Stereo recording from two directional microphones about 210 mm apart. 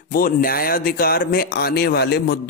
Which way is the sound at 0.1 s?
45° left (ahead or behind).